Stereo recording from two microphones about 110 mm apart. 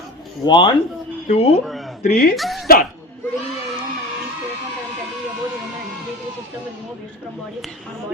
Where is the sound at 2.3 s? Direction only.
Centre (ahead or behind).